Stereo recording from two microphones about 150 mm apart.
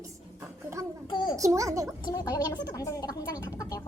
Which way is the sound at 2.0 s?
25° left (ahead or behind).